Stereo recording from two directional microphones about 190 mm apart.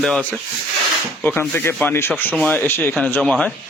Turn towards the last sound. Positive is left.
turn(degrees=5)  # may be behind; listen again after turning